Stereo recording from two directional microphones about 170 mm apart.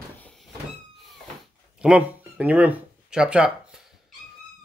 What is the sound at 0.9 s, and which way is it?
Cat, centre (ahead or behind).